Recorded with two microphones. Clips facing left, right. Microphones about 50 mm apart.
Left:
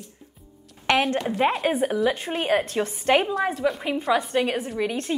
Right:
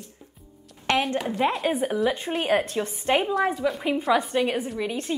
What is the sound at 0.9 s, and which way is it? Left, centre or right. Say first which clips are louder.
Speech: left 2 dB; left.